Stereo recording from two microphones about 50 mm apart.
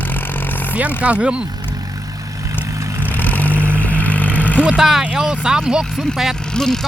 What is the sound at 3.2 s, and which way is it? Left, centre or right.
Vehicle, left.